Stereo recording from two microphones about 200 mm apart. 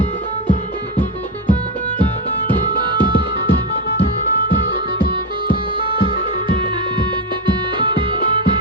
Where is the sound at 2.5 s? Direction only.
25° right (ahead or behind).